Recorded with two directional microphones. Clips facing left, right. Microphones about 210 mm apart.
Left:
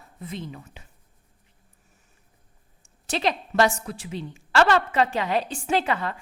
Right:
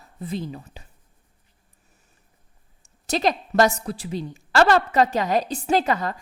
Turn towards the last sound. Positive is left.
turn(degrees=-40)  # may be behind; listen again after turning